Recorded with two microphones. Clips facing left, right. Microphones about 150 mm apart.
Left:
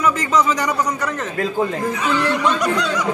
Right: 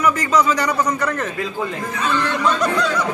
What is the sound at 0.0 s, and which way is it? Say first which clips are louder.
A man's voice: even; 20° left (ahead or behind).